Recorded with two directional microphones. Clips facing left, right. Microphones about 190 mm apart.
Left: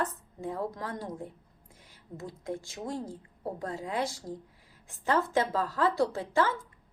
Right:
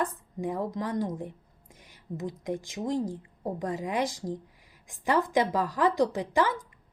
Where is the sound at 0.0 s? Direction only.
15° right (ahead or behind).